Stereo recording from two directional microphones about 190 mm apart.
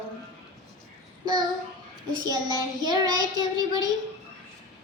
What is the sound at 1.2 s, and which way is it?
Child singing, 20° right (ahead or behind).